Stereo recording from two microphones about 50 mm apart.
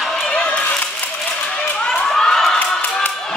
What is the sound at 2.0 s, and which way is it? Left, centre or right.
Crowd, centre.